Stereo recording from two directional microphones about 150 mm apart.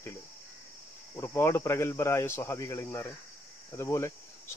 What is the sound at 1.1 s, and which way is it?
Speech, 20° left (ahead or behind).